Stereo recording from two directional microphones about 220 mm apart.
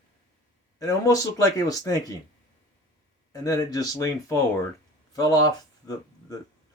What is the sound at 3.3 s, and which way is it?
Speech, 15° left (ahead or behind).